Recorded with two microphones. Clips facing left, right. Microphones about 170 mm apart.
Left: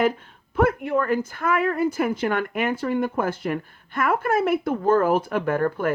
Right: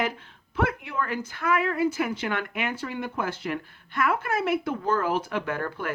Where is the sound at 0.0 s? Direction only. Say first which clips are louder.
Left 7 dB; 50° left (ahead or behind).